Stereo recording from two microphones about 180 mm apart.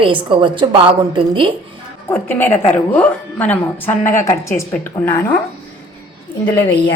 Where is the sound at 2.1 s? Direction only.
10° left (ahead or behind).